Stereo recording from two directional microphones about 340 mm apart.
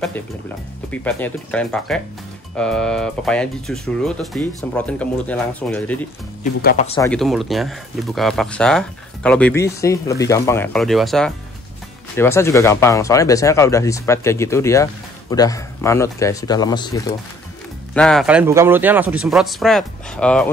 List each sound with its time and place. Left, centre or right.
1.0 s speech: centre
6.4 s speech: left
7.0 s speech: centre